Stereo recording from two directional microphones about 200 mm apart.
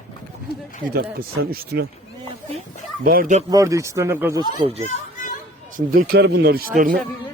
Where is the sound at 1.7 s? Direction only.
55° right (ahead or behind).